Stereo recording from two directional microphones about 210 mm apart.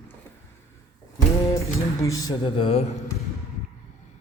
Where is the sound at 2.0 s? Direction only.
15° left (ahead or behind).